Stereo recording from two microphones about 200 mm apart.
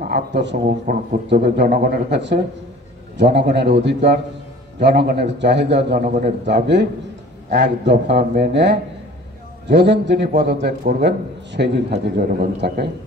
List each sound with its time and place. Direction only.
0.1 s a man's voice: 60° right (ahead or behind)
5.9 s a man's voice: 40° right (ahead or behind)
6.2 s a man's voice: 55° right (ahead or behind)